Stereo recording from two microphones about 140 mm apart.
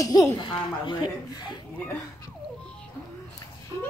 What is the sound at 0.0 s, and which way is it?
A woman's voice, 25° left (ahead or behind).